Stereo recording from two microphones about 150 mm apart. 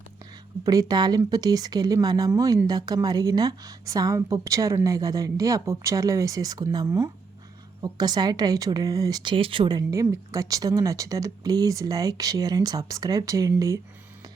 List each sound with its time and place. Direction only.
0.6 s speech: 25° right (ahead or behind)